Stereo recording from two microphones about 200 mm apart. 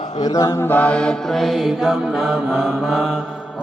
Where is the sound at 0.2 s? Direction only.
20° left (ahead or behind).